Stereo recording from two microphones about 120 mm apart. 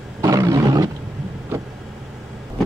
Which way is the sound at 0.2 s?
30° right (ahead or behind).